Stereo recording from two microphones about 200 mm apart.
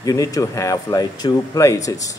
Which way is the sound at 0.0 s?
15° left (ahead or behind).